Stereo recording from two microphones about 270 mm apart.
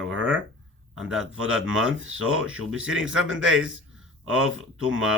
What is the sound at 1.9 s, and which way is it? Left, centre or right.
Speech, right.